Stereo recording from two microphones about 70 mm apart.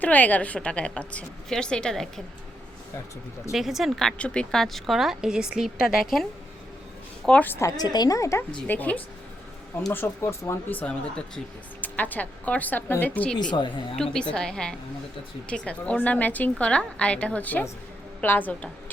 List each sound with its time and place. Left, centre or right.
0.0 s a woman's voice: left
3.5 s a woman's voice: centre
7.2 s a woman's voice: centre
7.8 s a woman's voice: left
8.2 s speech: left
8.6 s speech: left
9.9 s speech: left
10.7 s speech: left
13.5 s a woman's voice: left
13.9 s a woman's voice: centre